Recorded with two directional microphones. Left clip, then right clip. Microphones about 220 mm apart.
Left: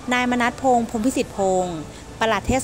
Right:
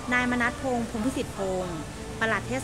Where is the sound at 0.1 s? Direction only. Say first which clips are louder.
Left 5 dB; 30° left (ahead or behind).